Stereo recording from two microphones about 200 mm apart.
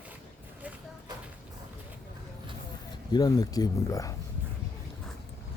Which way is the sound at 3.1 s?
20° left (ahead or behind).